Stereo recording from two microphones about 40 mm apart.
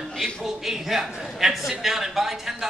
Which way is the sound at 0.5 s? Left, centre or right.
Centre.